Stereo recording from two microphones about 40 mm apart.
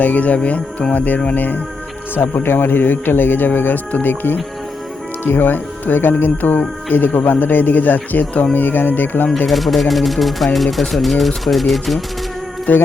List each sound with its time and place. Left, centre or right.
0.0 s speech: left
2.1 s speech: left
6.3 s speech: left
9.5 s speech: centre
12.7 s speech: left